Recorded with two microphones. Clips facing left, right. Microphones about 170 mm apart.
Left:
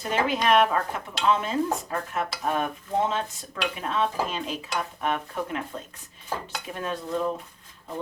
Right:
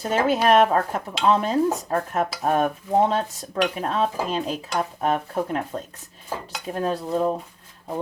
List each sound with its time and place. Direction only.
0.0 s dishes: 40° right (ahead or behind)